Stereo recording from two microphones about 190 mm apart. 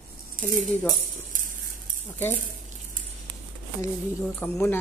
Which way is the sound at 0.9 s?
45° right (ahead or behind).